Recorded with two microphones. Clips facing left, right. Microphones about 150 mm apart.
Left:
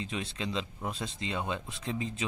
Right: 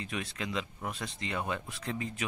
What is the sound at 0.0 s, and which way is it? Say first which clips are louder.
Speech: left 2 dB; 25° left (ahead or behind).